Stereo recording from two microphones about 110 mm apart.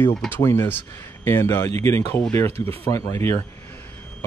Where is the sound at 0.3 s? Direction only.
20° left (ahead or behind).